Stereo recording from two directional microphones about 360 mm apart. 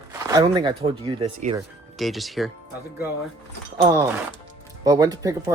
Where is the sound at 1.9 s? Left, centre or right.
Centre.